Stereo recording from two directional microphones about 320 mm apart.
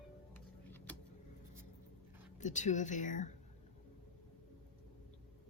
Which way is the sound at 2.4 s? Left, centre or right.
Left.